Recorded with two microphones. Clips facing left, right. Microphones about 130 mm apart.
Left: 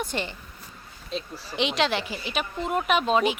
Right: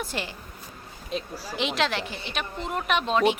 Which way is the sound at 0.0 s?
Centre (ahead or behind).